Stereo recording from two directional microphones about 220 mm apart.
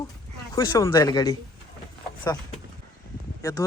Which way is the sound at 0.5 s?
20° left (ahead or behind).